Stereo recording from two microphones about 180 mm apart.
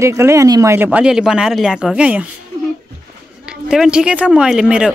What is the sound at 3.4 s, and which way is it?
Speech, 5° right (ahead or behind).